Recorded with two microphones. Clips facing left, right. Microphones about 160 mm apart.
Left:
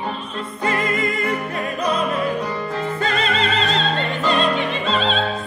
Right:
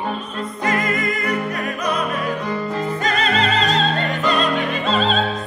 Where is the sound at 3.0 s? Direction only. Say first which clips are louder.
Right 1 dB; 30° left (ahead or behind).